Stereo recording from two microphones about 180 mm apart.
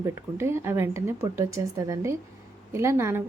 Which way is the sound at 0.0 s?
15° right (ahead or behind).